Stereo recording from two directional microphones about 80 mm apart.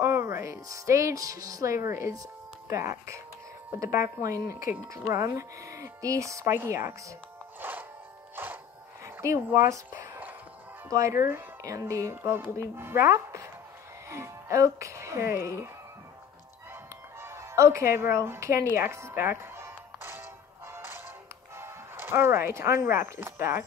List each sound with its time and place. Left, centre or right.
0.0 s a woman's voice: right
6.4 s speech: right
7.6 s music: right
9.0 s a sound: right
10.9 s speech: right
17.2 s speech: right
20.7 s music: right
21.5 s speech: right